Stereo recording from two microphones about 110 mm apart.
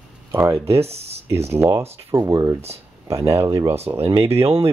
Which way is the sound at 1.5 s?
25° right (ahead or behind).